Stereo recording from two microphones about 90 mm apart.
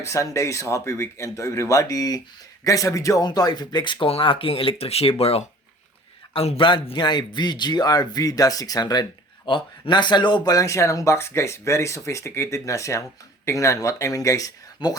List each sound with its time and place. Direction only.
0.0 s speech: 35° left (ahead or behind)
3.2 s a man's voice: 50° left (ahead or behind)
4.0 s speech: 80° left
6.3 s a man's voice: 70° left (ahead or behind); by 9.0 s 45° left (ahead or behind)
9.5 s speech: 65° left (ahead or behind); by 14.9 s 45° left (ahead or behind)